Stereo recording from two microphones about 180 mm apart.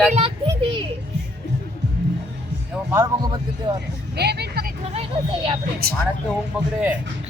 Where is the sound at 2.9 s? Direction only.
20° right (ahead or behind).